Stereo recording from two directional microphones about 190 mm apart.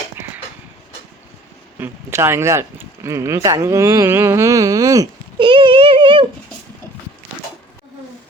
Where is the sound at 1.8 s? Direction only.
15° right (ahead or behind).